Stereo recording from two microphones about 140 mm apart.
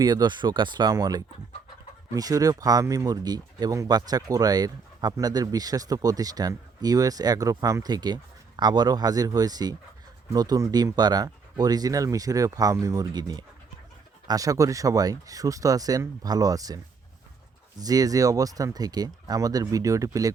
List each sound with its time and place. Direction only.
0.0 s speech: 30° right (ahead or behind)